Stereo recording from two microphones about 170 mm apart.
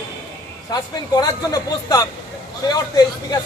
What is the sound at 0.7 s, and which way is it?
Speech, 25° left (ahead or behind).